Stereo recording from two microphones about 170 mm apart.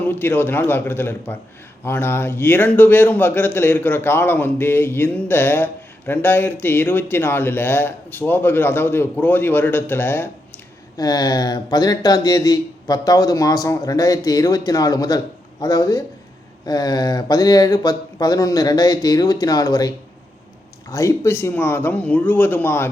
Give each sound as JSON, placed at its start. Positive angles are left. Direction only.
{"t": 0.0, "sound": "a man's voice", "side_deg": 10}
{"t": 10.9, "sound": "speech", "side_deg": 25}
{"t": 20.9, "sound": "a man's voice", "side_deg": 20}